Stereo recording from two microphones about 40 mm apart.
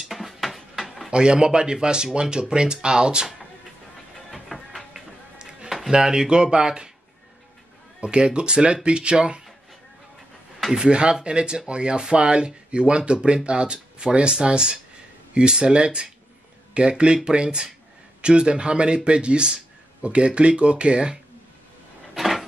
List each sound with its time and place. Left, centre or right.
0.1 s a sound: centre
1.1 s speech: right
4.3 s music: centre
5.4 s music: right
5.9 s speech: centre
8.0 s speech: right
10.7 s speech: right
22.1 s a sound: centre